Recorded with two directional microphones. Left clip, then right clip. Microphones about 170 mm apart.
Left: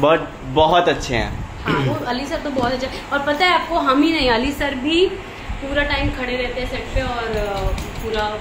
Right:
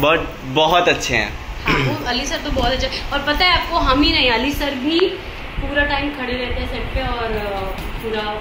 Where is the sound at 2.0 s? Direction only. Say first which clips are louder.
Right 2 dB; 65° left (ahead or behind).